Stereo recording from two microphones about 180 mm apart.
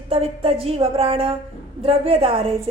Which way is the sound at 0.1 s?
30° right (ahead or behind).